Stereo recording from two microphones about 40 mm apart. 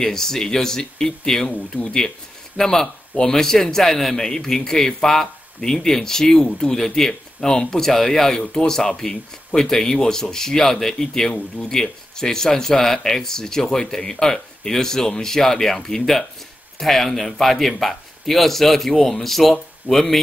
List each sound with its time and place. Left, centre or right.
0.0 s speech: centre
1.5 s speech: left
2.0 s speech: centre